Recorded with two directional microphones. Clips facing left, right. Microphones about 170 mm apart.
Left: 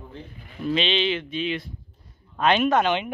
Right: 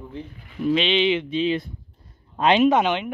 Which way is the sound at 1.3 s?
30° right (ahead or behind).